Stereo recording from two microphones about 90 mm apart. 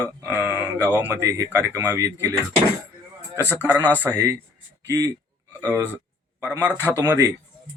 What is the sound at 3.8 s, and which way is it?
Speech, 20° right (ahead or behind).